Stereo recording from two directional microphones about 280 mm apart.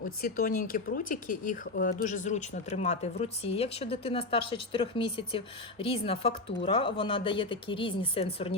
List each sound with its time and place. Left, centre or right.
0.0 s speech: left